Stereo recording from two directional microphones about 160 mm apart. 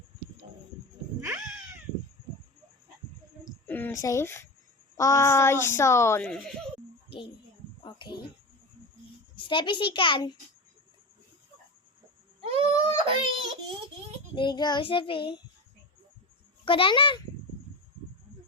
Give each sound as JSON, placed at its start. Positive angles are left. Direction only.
{"t": 1.2, "sound": "cat", "side_deg": -5}
{"t": 3.7, "sound": "speech", "side_deg": 10}
{"t": 6.2, "sound": "speech", "side_deg": 5}
{"t": 7.9, "sound": "a sound", "side_deg": 30}
{"t": 9.3, "sound": "a child's voice", "side_deg": 30}
{"t": 12.4, "sound": "baby cry", "side_deg": -40}
{"t": 14.3, "sound": "child singing", "side_deg": 30}
{"t": 16.6, "sound": "child singing", "side_deg": 35}